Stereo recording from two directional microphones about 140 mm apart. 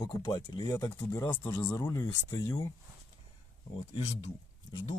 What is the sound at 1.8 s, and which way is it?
Speech, 30° left (ahead or behind).